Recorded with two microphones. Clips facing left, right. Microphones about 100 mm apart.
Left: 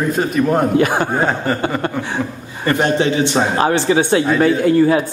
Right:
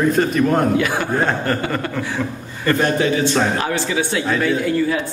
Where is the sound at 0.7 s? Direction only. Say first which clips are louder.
Left 4 dB; 40° left (ahead or behind).